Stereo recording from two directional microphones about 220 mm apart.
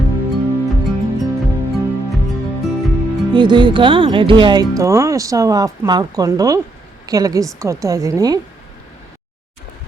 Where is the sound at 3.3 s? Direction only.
20° right (ahead or behind).